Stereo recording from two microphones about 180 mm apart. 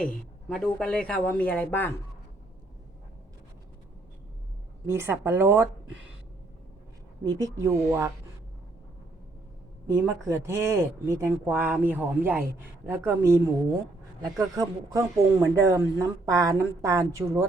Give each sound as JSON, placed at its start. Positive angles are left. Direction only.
{"t": 0.0, "sound": "speech", "side_deg": 5}
{"t": 4.9, "sound": "speech", "side_deg": -15}
{"t": 7.6, "sound": "speech", "side_deg": -15}
{"t": 9.8, "sound": "speech", "side_deg": -15}